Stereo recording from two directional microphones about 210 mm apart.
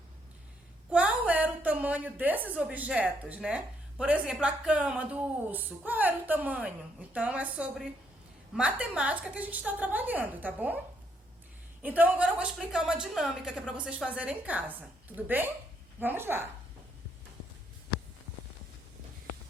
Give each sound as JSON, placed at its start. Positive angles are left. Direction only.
{"t": 0.9, "sound": "a woman's voice", "side_deg": -5}
{"t": 11.8, "sound": "a woman's voice", "side_deg": -10}